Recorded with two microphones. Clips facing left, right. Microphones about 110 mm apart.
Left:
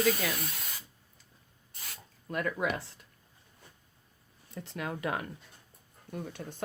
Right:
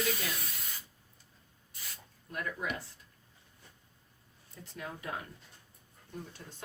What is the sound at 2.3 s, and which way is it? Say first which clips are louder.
Speech: left 6 dB; 90° left.